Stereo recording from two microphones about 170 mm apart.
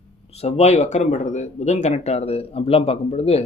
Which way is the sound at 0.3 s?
40° left (ahead or behind).